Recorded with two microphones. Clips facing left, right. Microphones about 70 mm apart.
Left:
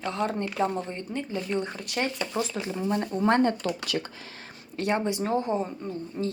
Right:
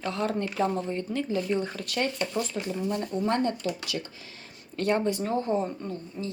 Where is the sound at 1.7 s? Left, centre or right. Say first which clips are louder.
Even; centre.